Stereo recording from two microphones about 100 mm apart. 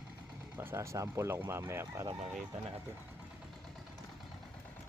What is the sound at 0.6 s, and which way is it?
Speech, 25° right (ahead or behind).